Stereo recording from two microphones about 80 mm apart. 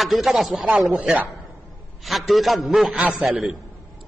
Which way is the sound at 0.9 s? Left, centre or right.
Centre.